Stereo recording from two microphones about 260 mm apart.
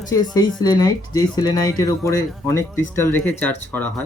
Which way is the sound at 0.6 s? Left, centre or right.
Centre.